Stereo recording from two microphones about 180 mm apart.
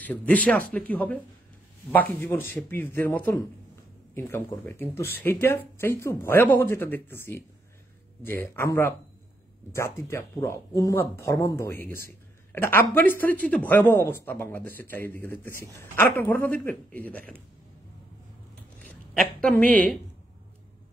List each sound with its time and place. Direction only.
0.0 s speech: 10° left (ahead or behind)
19.4 s speech: 10° left (ahead or behind)